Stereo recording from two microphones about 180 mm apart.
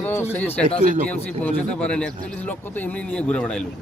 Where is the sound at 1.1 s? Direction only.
10° left (ahead or behind).